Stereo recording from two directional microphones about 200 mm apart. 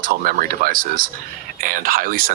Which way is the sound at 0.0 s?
45° right (ahead or behind).